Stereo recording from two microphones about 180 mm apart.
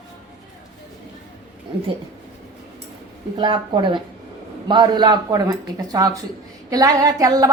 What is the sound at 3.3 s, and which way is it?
A woman's voice, 25° right (ahead or behind).